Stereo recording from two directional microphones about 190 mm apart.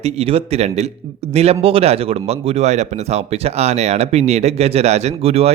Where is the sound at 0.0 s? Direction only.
30° right (ahead or behind).